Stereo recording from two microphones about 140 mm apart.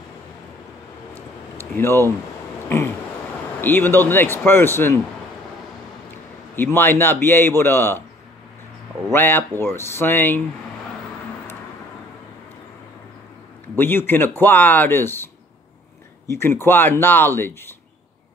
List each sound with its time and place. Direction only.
1.1 s a sound: 15° left (ahead or behind)
3.6 s speech: 15° left (ahead or behind)
6.5 s speech: 15° left (ahead or behind)
9.1 s speech: 15° left (ahead or behind)
13.7 s speech: 15° left (ahead or behind)
16.3 s speech: 15° left (ahead or behind)